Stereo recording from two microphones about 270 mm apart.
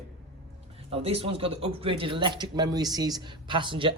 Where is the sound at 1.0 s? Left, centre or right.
Right.